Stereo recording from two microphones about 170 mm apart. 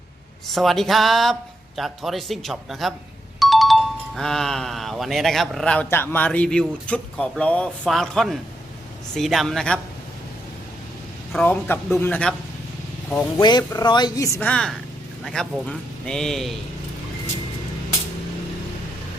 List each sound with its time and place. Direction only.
0.4 s speech: centre (ahead or behind)
11.3 s speech: 5° left (ahead or behind)
13.4 s speech: 25° left (ahead or behind); by 16.6 s centre (ahead or behind)